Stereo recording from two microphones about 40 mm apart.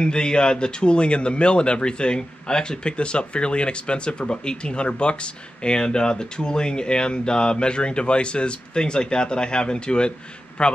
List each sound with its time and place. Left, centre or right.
0.0 s a man's voice: left